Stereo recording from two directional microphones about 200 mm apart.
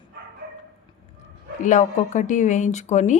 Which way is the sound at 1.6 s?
35° left (ahead or behind).